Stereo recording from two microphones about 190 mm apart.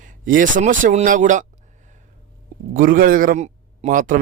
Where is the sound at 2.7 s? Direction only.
45° right (ahead or behind).